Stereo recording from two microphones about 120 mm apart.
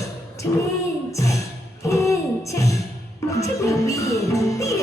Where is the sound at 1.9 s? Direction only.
25° left (ahead or behind).